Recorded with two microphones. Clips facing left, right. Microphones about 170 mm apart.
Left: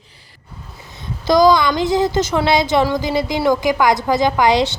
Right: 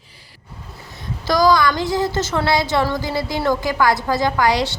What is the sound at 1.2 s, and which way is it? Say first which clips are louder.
Speech: left 3 dB; 20° left (ahead or behind).